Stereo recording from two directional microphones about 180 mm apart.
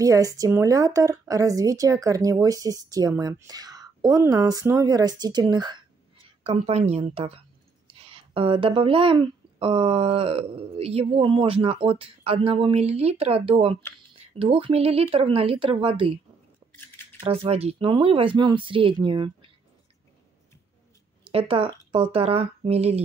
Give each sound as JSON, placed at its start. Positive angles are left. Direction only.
{"t": 0.0, "sound": "speech", "side_deg": -20}
{"t": 6.4, "sound": "speech", "side_deg": -35}
{"t": 17.2, "sound": "speech", "side_deg": -30}
{"t": 21.3, "sound": "speech", "side_deg": -30}